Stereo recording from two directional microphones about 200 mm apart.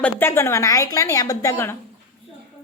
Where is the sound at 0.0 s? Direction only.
10° left (ahead or behind).